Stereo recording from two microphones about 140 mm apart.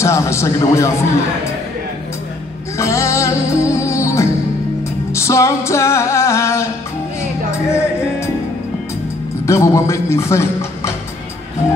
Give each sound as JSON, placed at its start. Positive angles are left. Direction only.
{"t": 0.0, "sound": "a man's voice", "side_deg": 20}
{"t": 2.8, "sound": "music", "side_deg": 20}
{"t": 9.5, "sound": "a man's voice", "side_deg": 20}